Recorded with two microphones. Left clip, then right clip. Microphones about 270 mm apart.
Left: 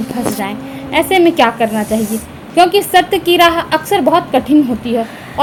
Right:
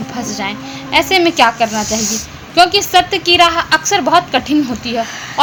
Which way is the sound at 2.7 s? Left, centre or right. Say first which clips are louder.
Left 1 dB; centre.